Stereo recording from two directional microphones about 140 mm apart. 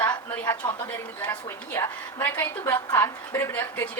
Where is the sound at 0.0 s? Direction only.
30° left (ahead or behind).